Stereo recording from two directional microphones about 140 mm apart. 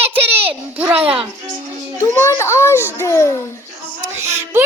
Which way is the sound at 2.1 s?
15° left (ahead or behind).